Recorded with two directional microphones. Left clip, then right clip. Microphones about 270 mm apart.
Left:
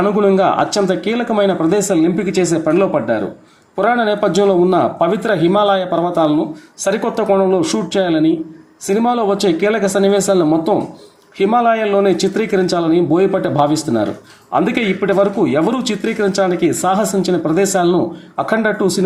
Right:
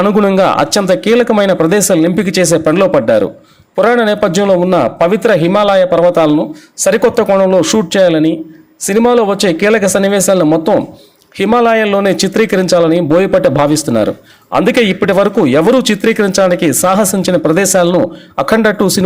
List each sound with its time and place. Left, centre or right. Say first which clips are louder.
0.0 s a man's voice: right 3 dB; right